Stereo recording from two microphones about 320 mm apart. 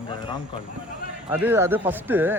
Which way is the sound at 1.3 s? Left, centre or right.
Centre.